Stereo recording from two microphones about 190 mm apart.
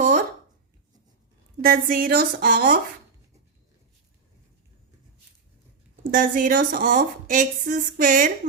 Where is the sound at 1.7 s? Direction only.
45° right (ahead or behind).